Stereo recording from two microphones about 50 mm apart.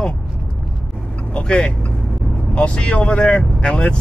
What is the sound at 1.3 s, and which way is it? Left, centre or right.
Speech, left.